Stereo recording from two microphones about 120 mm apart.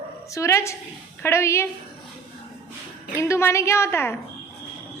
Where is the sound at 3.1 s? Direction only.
25° left (ahead or behind).